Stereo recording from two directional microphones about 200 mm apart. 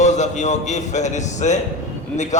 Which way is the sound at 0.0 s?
35° left (ahead or behind).